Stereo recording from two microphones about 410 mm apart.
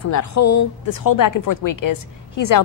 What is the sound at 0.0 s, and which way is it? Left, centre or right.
Speech, left.